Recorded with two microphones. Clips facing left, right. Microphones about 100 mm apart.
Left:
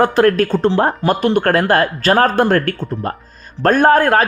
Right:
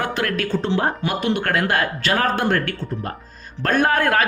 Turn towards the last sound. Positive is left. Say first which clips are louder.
# left 6 dB
turn(degrees=35)  # may be behind; listen again after turning